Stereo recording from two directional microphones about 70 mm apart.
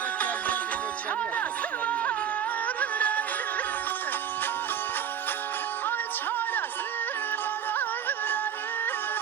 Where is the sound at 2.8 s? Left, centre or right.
Left.